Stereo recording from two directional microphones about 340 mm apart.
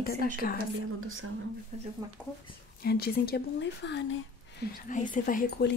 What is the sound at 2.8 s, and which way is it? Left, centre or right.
Speech, left.